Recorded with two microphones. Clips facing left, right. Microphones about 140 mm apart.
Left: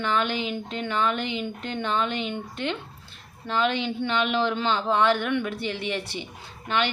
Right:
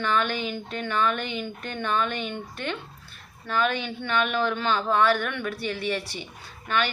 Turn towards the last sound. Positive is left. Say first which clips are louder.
# left 1 dB
turn(degrees=20)  # may be behind; listen again after turning